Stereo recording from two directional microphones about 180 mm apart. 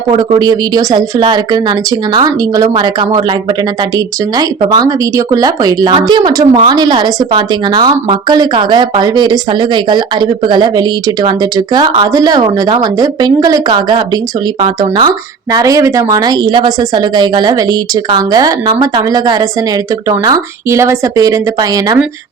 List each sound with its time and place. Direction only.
0.1 s a woman's voice: 25° right (ahead or behind)